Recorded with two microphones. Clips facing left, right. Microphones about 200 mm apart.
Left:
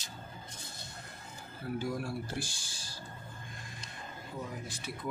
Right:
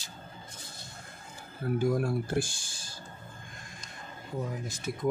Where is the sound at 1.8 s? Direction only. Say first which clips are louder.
Right 8 dB; 50° right (ahead or behind).